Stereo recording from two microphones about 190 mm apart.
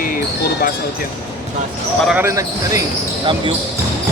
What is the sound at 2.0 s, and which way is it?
Speech, 10° right (ahead or behind).